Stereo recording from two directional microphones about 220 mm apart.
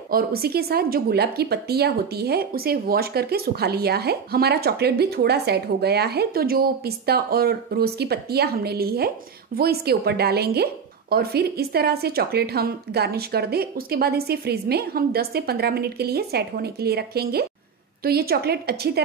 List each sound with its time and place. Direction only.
0.1 s a woman's voice: 45° right (ahead or behind)